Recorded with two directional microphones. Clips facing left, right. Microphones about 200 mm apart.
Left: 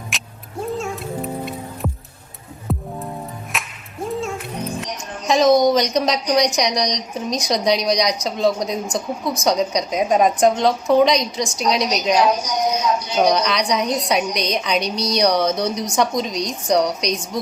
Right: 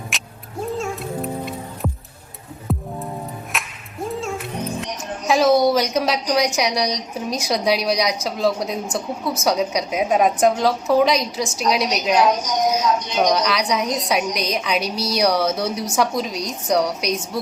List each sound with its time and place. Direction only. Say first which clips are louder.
0.1 s cat: even; centre (ahead or behind)
0.6 s music: even; centre (ahead or behind)
5.3 s a woman's voice: left 1 dB; 5° right (ahead or behind)